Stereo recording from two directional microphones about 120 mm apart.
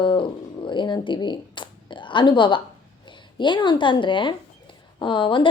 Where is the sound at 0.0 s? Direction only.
45° left (ahead or behind).